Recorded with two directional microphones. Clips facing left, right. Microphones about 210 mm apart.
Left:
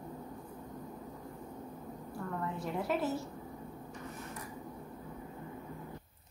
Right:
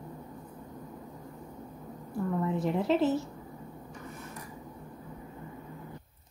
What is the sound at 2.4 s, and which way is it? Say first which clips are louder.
Speech: right 7 dB; 20° right (ahead or behind).